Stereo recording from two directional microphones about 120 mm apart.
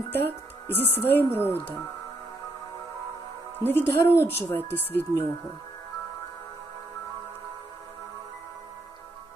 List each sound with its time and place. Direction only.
0.1 s speech: 15° left (ahead or behind)
3.6 s speech: 20° left (ahead or behind)